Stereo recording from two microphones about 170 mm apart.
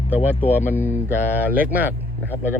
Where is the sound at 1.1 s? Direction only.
10° right (ahead or behind).